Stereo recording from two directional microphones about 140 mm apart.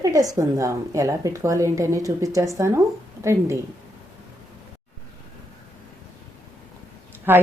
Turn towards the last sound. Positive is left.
turn(degrees=-15)  # may be behind; listen again after turning